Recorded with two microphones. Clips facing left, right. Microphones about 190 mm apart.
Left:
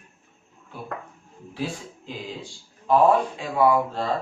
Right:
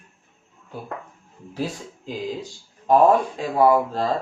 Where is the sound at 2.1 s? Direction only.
40° right (ahead or behind).